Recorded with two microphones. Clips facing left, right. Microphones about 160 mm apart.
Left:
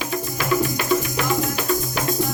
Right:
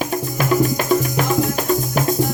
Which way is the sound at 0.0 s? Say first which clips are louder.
Right 4 dB; 45° right (ahead or behind).